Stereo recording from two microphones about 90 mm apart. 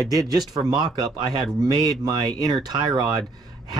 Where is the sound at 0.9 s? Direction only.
60° right (ahead or behind).